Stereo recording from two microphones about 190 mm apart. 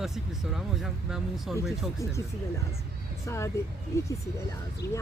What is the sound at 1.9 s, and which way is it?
Speech, 15° left (ahead or behind).